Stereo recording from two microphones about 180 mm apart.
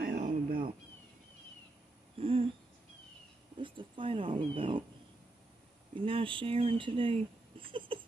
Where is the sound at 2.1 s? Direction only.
30° right (ahead or behind).